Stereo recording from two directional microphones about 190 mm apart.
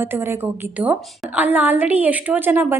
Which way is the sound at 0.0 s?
10° right (ahead or behind).